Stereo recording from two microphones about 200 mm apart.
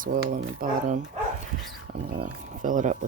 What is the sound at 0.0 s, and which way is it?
Speech, 40° right (ahead or behind).